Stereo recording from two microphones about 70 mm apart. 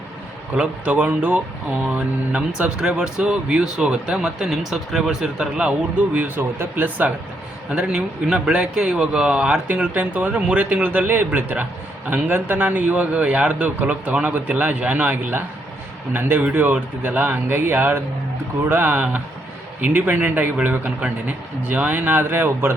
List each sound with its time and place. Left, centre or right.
0.5 s a man's voice: centre
7.7 s a man's voice: centre; by 22.7 s right